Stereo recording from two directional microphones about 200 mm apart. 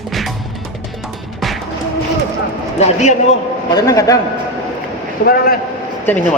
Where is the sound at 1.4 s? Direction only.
Centre (ahead or behind).